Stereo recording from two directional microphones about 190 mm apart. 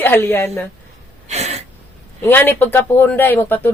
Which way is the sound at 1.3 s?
35° right (ahead or behind).